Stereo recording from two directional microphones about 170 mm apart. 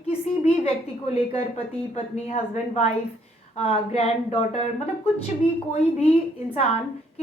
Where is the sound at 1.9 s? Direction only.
40° left (ahead or behind).